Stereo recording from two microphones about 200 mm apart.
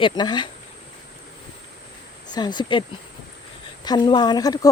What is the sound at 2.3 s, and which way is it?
Speech, 20° left (ahead or behind).